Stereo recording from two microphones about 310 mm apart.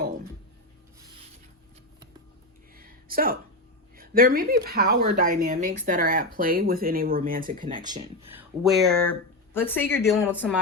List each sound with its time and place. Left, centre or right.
2.7 s a sound: right
3.9 s speech: right
7.8 s speech: centre
8.6 s speech: centre